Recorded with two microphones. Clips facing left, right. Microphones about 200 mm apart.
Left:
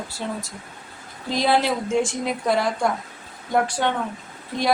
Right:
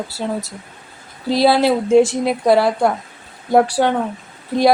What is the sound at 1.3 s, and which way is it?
A woman's voice, 35° right (ahead or behind).